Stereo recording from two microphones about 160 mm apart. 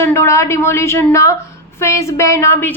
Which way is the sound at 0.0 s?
15° left (ahead or behind).